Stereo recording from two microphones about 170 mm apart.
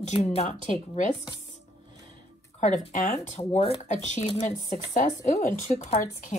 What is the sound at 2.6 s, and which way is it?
Speech, 45° left (ahead or behind).